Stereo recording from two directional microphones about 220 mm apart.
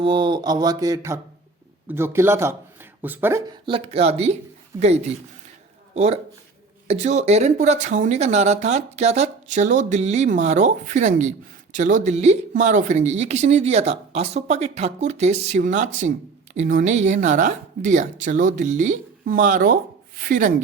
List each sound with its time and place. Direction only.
0.0 s a sound: 20° right (ahead or behind)
3.7 s speech: 25° right (ahead or behind)
5.9 s speech: 30° right (ahead or behind)